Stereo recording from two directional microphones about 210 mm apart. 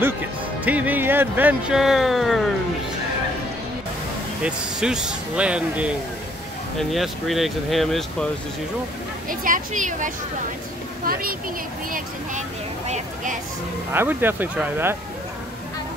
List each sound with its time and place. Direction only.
0.7 s speech: 5° right (ahead or behind)
4.4 s speech: 5° right (ahead or behind)
9.3 s speech: 40° right (ahead or behind)
11.9 s vehicle: 35° right (ahead or behind)
13.9 s speech: 10° right (ahead or behind)